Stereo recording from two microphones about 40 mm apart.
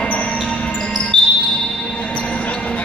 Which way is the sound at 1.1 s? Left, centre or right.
Left.